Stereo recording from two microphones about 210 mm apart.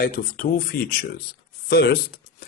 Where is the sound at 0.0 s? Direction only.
45° left (ahead or behind).